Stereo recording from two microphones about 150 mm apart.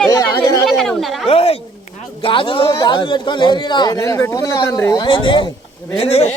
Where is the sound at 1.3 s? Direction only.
40° left (ahead or behind).